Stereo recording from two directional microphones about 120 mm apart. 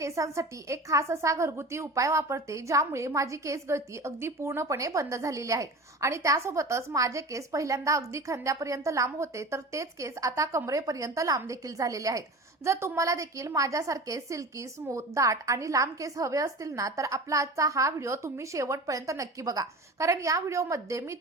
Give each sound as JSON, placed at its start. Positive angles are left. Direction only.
{"t": 0.0, "sound": "a woman's voice", "side_deg": -25}